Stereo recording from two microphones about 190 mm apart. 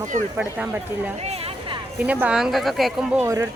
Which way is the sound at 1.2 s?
30° right (ahead or behind).